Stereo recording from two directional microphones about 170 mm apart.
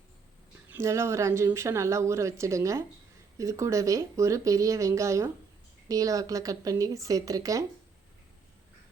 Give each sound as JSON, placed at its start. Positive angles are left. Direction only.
{"t": 0.7, "sound": "speech", "side_deg": -15}